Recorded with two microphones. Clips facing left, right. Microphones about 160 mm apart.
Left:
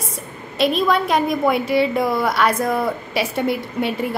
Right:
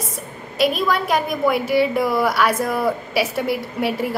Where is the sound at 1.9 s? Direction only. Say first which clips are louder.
Even; 25° left (ahead or behind).